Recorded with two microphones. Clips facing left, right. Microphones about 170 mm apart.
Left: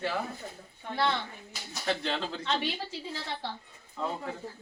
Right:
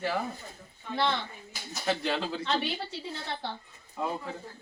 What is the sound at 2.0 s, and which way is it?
Speech, 5° right (ahead or behind).